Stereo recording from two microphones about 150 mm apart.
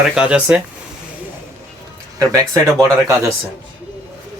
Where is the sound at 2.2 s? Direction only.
25° right (ahead or behind).